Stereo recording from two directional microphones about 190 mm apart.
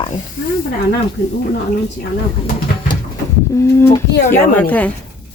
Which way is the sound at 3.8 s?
10° left (ahead or behind).